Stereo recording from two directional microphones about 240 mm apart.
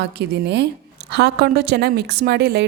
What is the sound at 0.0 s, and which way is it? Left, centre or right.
A woman's voice, right.